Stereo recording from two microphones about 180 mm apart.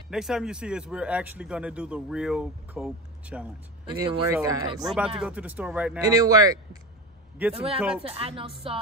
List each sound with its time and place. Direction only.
0.1 s speech: 5° right (ahead or behind); by 4.8 s 20° right (ahead or behind)
4.8 s speech: 5° right (ahead or behind)
5.9 s speech: 20° right (ahead or behind)
7.5 s speech: 30° right (ahead or behind)